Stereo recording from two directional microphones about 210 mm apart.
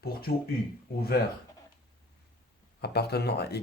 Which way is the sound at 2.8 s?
50° left (ahead or behind).